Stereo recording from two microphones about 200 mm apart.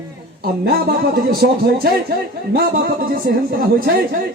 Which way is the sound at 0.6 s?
50° right (ahead or behind).